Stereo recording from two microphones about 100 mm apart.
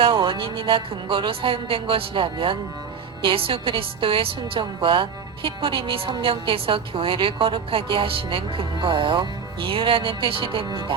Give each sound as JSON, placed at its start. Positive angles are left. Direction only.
{"t": 0.0, "sound": "a woman's voice", "side_deg": -60}